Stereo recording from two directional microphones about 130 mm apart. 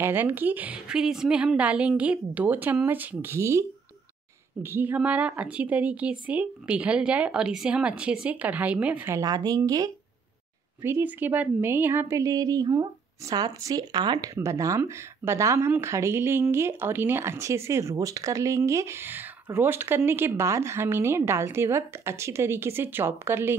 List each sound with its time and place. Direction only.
0.0 s speech: 15° right (ahead or behind)
4.6 s speech: 15° right (ahead or behind)
9.2 s a woman's voice: 30° right (ahead or behind)